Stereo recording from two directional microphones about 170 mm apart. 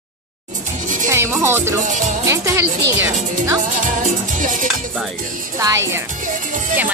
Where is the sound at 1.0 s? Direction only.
15° right (ahead or behind).